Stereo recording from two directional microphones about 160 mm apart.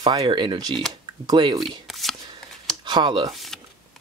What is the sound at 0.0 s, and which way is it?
Speech, 25° right (ahead or behind).